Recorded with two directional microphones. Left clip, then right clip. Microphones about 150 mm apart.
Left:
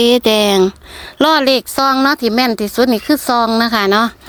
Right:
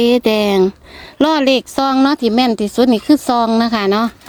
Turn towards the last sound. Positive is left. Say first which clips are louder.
# left 3 dB
turn(degrees=-10)  # may be behind; listen again after turning